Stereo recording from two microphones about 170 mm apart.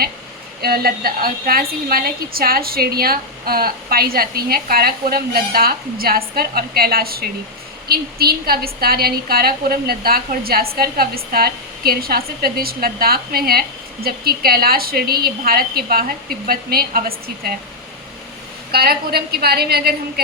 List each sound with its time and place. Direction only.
0.6 s a woman's voice: 65° right (ahead or behind)
18.7 s a woman's voice: 65° right (ahead or behind)